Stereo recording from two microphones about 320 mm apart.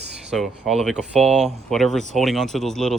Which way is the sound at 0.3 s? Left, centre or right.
Centre.